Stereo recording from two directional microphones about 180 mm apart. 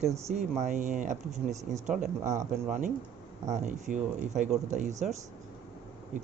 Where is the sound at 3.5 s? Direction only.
45° right (ahead or behind).